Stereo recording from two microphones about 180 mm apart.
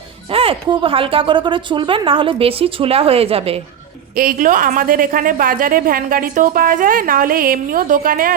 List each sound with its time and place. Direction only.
0.3 s speech: 30° right (ahead or behind)
4.2 s a woman's voice: 50° right (ahead or behind)